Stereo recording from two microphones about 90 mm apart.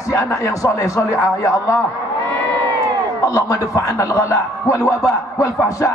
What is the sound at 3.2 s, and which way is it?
A man's voice, 40° left (ahead or behind).